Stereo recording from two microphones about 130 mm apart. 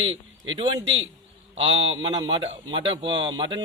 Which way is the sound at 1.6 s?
50° right (ahead or behind).